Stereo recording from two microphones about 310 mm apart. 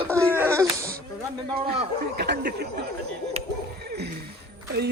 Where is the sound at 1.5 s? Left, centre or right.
Right.